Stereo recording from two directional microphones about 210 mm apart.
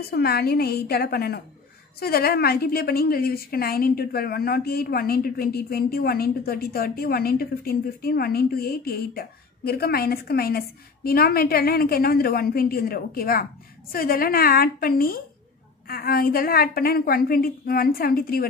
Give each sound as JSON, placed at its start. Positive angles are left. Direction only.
{"t": 0.1, "sound": "a woman's voice", "side_deg": 50}